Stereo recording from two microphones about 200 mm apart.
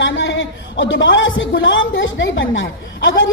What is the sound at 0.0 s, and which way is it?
A man's voice, 65° left (ahead or behind).